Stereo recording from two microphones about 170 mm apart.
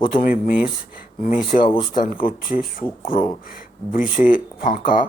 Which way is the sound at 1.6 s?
30° left (ahead or behind).